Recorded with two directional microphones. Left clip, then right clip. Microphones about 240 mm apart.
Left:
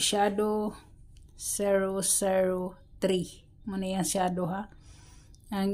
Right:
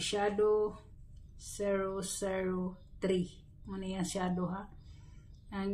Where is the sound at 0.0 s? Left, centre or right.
Left.